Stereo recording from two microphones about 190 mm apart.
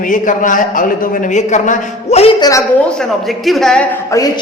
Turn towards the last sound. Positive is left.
turn(degrees=15)  # may be behind; listen again after turning